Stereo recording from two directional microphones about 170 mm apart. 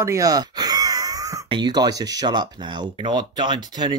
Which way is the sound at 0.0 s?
20° right (ahead or behind).